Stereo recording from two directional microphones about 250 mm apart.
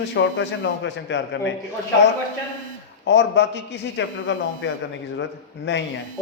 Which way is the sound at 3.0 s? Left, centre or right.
Left.